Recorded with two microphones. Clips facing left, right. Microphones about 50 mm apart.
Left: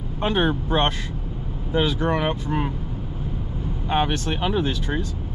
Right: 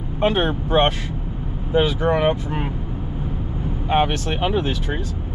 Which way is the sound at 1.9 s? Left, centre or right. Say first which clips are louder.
Right 4 dB; centre.